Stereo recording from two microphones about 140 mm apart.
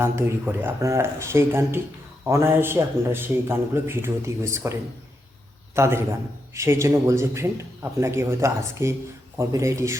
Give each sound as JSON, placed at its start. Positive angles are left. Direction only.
{"t": 0.0, "sound": "a man's voice", "side_deg": -15}